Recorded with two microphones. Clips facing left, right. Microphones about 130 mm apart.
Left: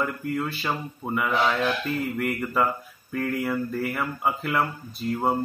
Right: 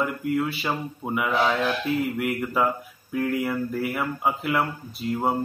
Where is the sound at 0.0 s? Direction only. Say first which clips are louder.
Right 3 dB; 5° right (ahead or behind).